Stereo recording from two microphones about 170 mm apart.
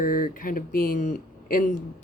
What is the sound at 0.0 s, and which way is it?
Speech, 55° left (ahead or behind).